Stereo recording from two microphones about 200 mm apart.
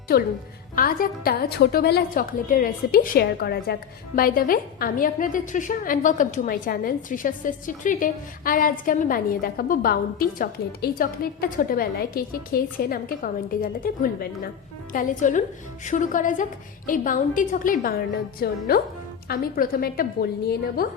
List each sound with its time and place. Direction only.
0.1 s a woman's voice: 50° left (ahead or behind)